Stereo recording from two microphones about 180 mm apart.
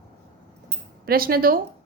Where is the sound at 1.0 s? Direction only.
55° right (ahead or behind).